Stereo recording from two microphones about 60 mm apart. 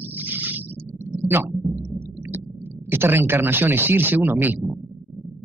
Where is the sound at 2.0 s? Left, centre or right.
Right.